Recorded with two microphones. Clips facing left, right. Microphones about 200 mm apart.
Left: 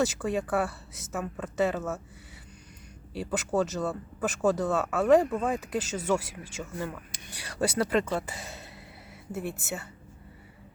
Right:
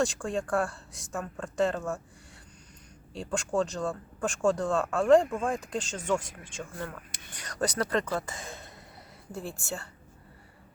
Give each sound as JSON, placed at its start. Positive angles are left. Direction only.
{"t": 0.0, "sound": "speech", "side_deg": 5}
{"t": 3.1, "sound": "speech", "side_deg": 5}
{"t": 9.5, "sound": "a woman's voice", "side_deg": 20}